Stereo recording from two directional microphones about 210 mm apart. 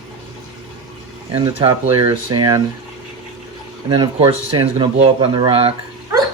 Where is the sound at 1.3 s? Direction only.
25° right (ahead or behind).